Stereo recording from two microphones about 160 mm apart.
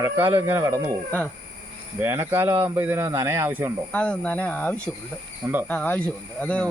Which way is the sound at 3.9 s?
5° left (ahead or behind).